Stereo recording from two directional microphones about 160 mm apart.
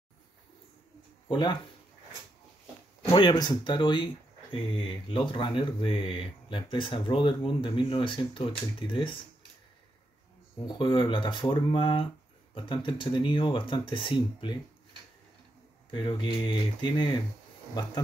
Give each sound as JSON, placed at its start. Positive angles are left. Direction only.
{"t": 1.3, "sound": "speech", "side_deg": 30}
{"t": 3.1, "sound": "speech", "side_deg": 30}
{"t": 10.7, "sound": "speech", "side_deg": 30}
{"t": 15.9, "sound": "speech", "side_deg": 30}